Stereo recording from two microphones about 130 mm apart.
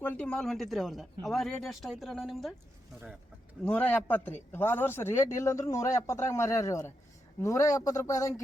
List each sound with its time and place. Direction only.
0.0 s speech: 10° left (ahead or behind)
3.6 s speech: 10° left (ahead or behind)